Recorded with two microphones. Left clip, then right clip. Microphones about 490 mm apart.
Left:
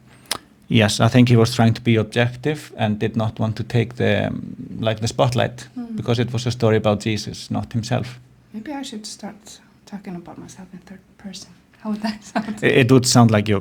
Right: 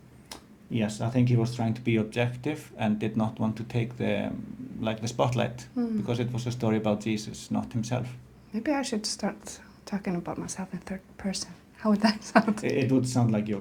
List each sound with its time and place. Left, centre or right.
0.3 s speech: left
8.5 s a woman's voice: centre
12.6 s speech: left